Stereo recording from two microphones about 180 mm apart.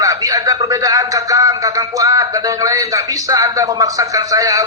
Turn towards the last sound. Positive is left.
turn(degrees=-20)  # may be behind; listen again after turning